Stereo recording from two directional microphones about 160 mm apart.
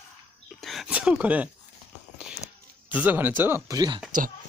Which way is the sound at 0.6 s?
5° right (ahead or behind).